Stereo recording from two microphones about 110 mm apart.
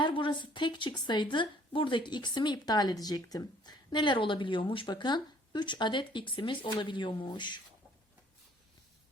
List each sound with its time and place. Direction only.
0.0 s a woman's voice: 50° left (ahead or behind)